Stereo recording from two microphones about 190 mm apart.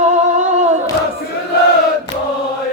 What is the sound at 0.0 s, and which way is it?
Singing, 40° right (ahead or behind).